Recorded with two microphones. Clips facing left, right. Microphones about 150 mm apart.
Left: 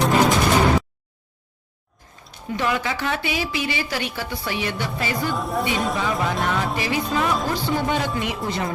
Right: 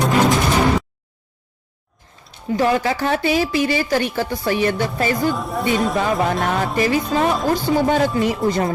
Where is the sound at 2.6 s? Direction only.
40° right (ahead or behind).